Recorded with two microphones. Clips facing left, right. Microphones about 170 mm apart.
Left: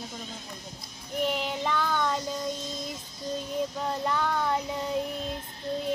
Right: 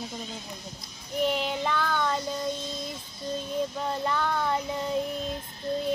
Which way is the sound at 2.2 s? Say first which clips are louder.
Right 1 dB; 40° left (ahead or behind).